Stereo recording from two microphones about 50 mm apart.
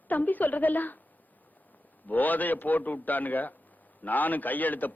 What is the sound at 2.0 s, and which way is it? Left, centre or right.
A man's voice, left.